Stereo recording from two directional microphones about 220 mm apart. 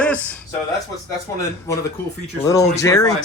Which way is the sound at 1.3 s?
15° left (ahead or behind).